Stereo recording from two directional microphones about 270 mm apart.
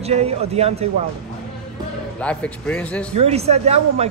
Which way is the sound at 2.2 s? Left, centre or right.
Centre.